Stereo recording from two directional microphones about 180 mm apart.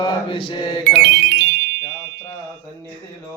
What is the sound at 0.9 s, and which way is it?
Music, 70° right (ahead or behind).